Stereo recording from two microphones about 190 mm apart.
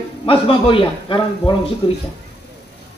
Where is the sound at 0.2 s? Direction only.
30° left (ahead or behind).